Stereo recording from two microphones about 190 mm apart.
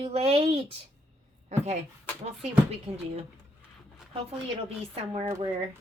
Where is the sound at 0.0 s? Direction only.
35° right (ahead or behind).